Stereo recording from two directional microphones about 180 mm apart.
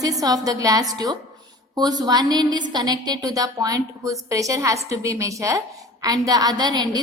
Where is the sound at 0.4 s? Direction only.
20° right (ahead or behind).